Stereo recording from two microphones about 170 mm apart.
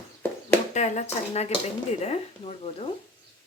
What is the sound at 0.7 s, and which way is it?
Speech, 40° left (ahead or behind).